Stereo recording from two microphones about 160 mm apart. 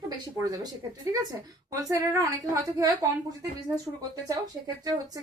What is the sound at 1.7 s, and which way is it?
A woman's voice, 20° right (ahead or behind).